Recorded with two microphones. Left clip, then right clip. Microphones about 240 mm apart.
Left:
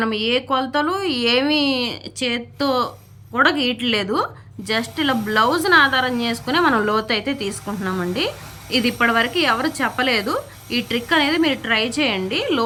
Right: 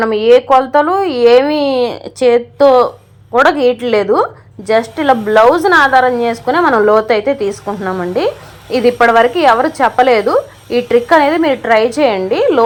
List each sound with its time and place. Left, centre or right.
0.0 s a woman's voice: centre
3.3 s speech: centre
6.5 s a woman's voice: centre